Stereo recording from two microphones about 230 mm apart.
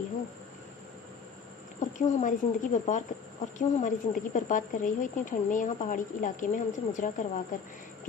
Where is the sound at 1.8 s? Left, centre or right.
Left.